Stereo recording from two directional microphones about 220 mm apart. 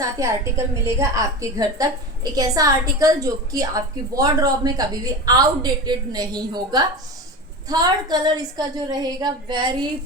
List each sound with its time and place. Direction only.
0.0 s a woman's voice: 15° right (ahead or behind)